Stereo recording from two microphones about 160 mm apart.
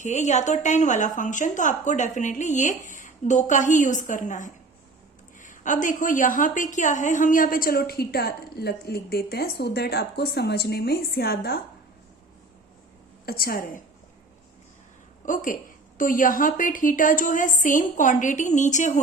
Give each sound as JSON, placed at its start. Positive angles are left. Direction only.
{"t": 0.0, "sound": "a woman's voice", "side_deg": 50}
{"t": 13.2, "sound": "a woman's voice", "side_deg": 70}
{"t": 15.2, "sound": "a woman's voice", "side_deg": 55}